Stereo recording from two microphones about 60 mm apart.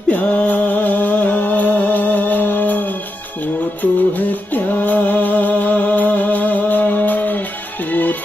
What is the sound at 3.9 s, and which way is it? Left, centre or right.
Music, left.